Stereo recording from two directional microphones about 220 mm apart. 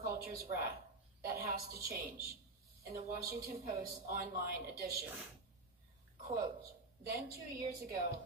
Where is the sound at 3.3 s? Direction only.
45° right (ahead or behind).